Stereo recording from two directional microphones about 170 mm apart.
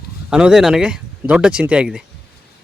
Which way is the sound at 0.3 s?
5° right (ahead or behind).